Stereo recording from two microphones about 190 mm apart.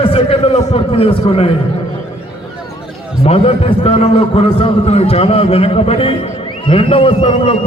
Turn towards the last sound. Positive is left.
turn(degrees=30)  # may be behind; listen again after turning